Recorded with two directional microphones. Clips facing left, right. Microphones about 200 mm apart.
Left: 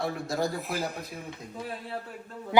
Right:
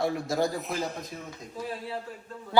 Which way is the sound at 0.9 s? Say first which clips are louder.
Even; 60° left (ahead or behind).